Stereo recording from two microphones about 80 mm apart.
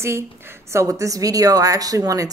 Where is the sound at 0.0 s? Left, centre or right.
Right.